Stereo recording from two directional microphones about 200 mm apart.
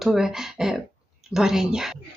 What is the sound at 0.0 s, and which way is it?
Speech, centre (ahead or behind).